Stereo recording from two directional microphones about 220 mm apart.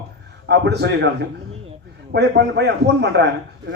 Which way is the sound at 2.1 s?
50° right (ahead or behind).